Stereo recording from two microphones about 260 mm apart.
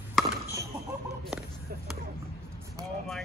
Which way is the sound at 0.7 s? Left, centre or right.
Centre.